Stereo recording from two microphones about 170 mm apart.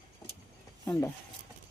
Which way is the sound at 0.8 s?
15° left (ahead or behind).